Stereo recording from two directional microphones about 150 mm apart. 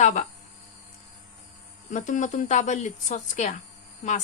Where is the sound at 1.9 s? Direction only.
55° left (ahead or behind).